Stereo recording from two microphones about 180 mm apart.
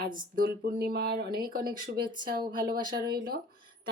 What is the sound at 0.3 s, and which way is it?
Speech, 55° right (ahead or behind).